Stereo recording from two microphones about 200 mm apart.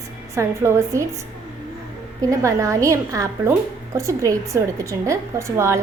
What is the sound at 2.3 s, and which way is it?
A woman's voice, 15° right (ahead or behind).